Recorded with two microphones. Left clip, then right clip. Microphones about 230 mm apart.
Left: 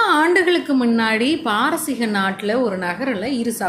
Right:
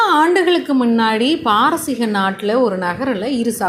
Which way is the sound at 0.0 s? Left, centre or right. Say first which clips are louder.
Right 2 dB; centre.